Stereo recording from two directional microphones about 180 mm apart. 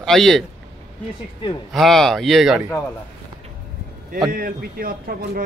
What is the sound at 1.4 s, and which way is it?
Speech, 25° left (ahead or behind).